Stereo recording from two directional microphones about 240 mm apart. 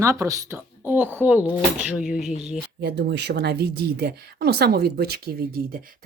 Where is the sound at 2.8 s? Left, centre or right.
Right.